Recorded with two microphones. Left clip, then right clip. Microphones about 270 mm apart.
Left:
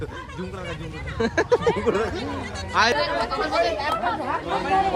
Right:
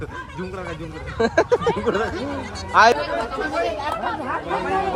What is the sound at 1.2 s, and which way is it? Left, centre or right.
Speech, centre.